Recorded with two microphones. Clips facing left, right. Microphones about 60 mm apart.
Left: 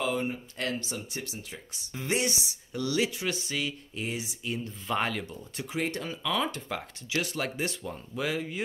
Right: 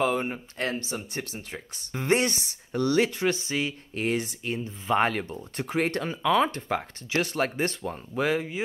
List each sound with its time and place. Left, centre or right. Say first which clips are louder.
0.0 s a sound: right 4 dB; right
0.6 s speech: right 4 dB; right
0.9 s speech: right 4 dB; right
3.4 s speech: right 4 dB; right
3.9 s speech: right 7 dB; right
4.9 s speech: right 6 dB; right
6.0 s speech: right 7 dB; right